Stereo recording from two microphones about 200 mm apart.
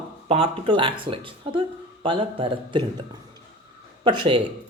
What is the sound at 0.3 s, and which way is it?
Speech, 30° right (ahead or behind).